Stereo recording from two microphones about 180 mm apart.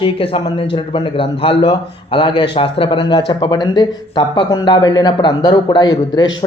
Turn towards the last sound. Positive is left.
turn(degrees=20)  # may be behind; listen again after turning